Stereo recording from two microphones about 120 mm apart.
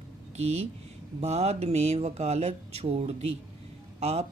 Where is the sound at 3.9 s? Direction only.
65° right (ahead or behind).